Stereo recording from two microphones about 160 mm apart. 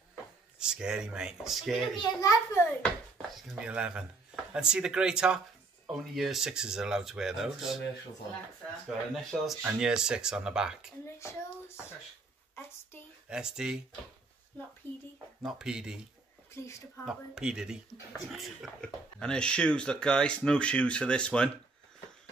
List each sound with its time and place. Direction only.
0.1 s speech: 5° right (ahead or behind)
2.0 s a child's voice: 20° left (ahead or behind)
3.2 s speech: 5° right (ahead or behind)
8.8 s speech: centre (ahead or behind)
13.3 s speech: 5° right (ahead or behind)
14.5 s a sound: 10° left (ahead or behind)
15.4 s speech: 5° right (ahead or behind)
16.6 s speech: 15° left (ahead or behind)
17.0 s speech: 5° right (ahead or behind)